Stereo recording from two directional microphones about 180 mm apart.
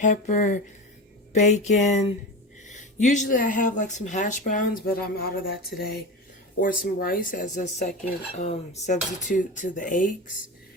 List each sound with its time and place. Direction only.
0.0 s speech: 45° left (ahead or behind)
5.7 s speech: 70° left (ahead or behind)
6.6 s speech: 50° left (ahead or behind)